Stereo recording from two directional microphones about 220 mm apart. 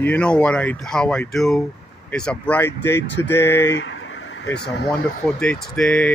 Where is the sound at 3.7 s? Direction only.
60° left (ahead or behind).